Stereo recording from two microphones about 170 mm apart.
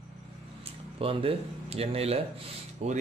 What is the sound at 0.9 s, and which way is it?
Speech, 35° right (ahead or behind).